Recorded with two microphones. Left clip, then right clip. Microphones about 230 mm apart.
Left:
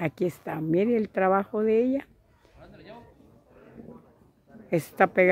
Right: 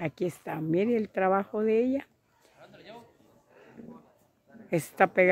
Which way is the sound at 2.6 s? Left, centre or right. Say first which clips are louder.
Left 1 dB; right.